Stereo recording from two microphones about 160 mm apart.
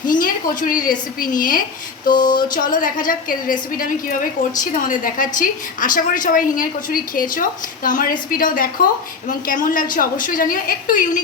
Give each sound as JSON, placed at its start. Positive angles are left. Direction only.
{"t": 0.0, "sound": "a woman's voice", "side_deg": 55}